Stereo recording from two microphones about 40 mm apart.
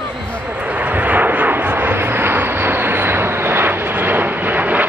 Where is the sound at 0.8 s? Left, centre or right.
Right.